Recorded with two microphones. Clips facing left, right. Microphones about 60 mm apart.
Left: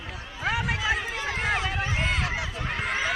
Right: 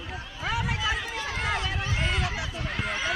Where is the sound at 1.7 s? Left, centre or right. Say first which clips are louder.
Left 2 dB; left.